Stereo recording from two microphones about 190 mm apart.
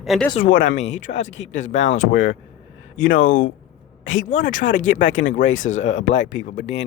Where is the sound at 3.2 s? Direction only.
45° left (ahead or behind).